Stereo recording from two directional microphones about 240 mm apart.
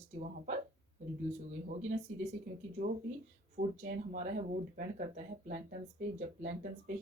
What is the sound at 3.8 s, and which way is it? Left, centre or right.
Speech, right.